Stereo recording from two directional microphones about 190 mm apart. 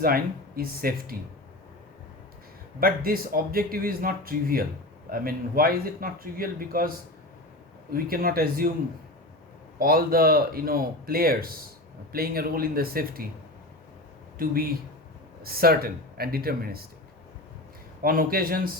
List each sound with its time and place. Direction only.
0.0 s speech: 50° right (ahead or behind)
2.8 s speech: 50° right (ahead or behind)
7.9 s speech: 50° right (ahead or behind)
9.7 s speech: 50° right (ahead or behind)
14.3 s speech: 50° right (ahead or behind)
18.0 s speech: 50° right (ahead or behind)